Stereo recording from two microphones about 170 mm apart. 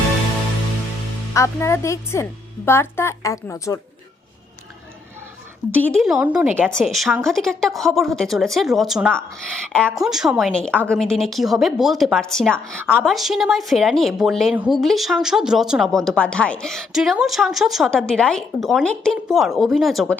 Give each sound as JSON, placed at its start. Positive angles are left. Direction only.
{"t": 1.3, "sound": "a woman's voice", "side_deg": 15}
{"t": 5.7, "sound": "a woman's voice", "side_deg": 5}
{"t": 6.7, "sound": "a woman's voice", "side_deg": 0}